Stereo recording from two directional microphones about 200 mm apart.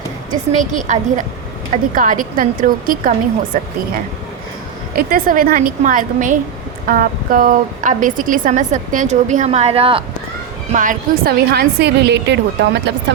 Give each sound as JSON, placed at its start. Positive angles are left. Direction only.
{"t": 0.6, "sound": "a woman's voice", "side_deg": -40}
{"t": 4.9, "sound": "a woman's voice", "side_deg": -45}
{"t": 10.7, "sound": "a woman's voice", "side_deg": -40}